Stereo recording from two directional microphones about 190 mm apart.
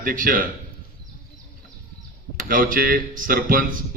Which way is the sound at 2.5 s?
45° right (ahead or behind).